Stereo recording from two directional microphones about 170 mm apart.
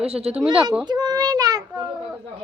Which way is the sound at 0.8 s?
25° right (ahead or behind).